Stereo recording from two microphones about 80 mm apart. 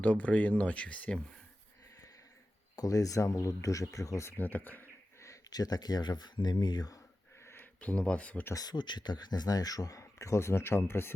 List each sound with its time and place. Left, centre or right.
0.0 s speech: centre
2.7 s speech: left
4.4 s speech: left
5.2 s speech: left
7.4 s speech: left
8.5 s speech: left